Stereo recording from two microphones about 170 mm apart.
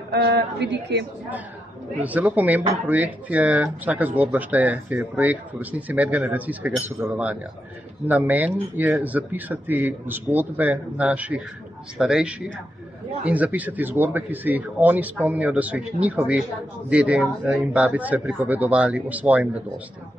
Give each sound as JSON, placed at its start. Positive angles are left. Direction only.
{"t": 0.1, "sound": "a man's voice", "side_deg": -75}
{"t": 2.0, "sound": "speech", "side_deg": -10}